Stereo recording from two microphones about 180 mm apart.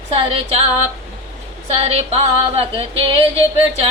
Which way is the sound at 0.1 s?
35° right (ahead or behind).